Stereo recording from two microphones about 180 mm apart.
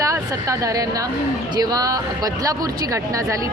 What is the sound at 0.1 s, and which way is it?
Speech, 20° right (ahead or behind).